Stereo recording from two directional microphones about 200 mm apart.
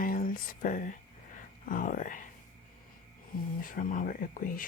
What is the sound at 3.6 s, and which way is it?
Speech, 40° left (ahead or behind).